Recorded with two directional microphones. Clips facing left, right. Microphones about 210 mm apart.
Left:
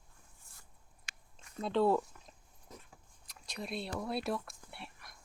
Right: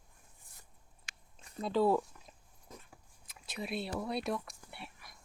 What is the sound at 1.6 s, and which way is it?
Speech, 5° right (ahead or behind).